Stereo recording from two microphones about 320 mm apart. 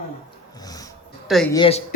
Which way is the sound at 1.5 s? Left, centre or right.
Centre.